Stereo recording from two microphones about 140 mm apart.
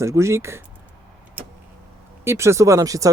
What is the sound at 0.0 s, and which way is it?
Speech, 20° right (ahead or behind).